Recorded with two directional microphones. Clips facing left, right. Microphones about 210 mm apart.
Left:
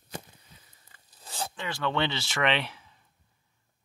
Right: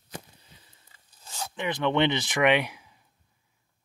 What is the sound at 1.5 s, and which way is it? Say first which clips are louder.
Speech: right 6 dB; 20° right (ahead or behind).